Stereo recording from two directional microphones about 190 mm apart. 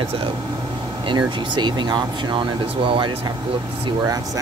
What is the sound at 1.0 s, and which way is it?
Speech, 25° right (ahead or behind).